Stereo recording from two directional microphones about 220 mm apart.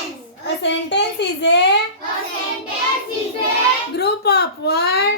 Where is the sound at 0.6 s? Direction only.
50° left (ahead or behind).